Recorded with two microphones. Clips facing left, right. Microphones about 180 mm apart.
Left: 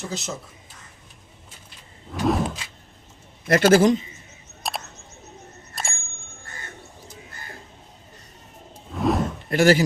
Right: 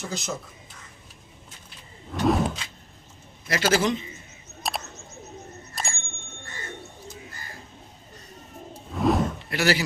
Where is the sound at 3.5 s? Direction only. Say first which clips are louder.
Left 7 dB; 55° left (ahead or behind).